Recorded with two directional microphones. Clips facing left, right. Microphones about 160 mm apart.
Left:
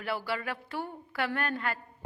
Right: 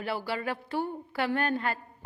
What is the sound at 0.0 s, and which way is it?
A woman's voice, 30° right (ahead or behind).